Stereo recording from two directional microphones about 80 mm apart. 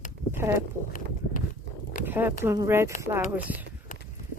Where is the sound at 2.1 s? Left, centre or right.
Right.